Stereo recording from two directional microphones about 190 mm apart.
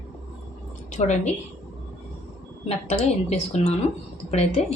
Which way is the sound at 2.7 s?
35° left (ahead or behind).